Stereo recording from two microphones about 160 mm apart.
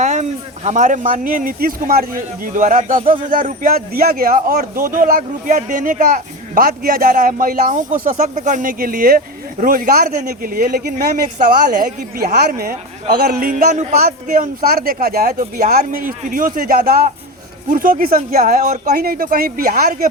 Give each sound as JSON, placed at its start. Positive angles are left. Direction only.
{"t": 0.0, "sound": "a man's voice", "side_deg": -45}
{"t": 14.6, "sound": "a man's voice", "side_deg": -70}